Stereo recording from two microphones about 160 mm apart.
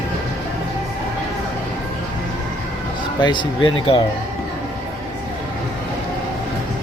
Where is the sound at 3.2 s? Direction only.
30° left (ahead or behind).